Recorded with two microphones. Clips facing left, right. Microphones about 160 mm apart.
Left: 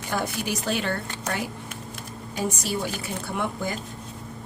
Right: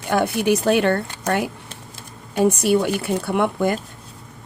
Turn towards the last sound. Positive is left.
turn(degrees=-60)  # may be behind; listen again after turning